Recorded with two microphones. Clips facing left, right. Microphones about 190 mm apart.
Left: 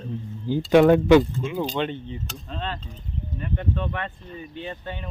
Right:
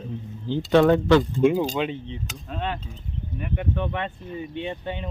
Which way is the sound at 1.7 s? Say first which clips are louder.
Even; 5° right (ahead or behind).